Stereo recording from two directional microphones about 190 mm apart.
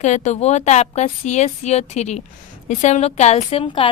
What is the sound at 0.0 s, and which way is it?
A woman's voice, 40° left (ahead or behind).